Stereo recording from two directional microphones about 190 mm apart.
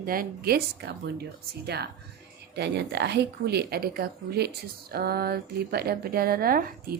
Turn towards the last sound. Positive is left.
turn(degrees=-50)  # may be behind; listen again after turning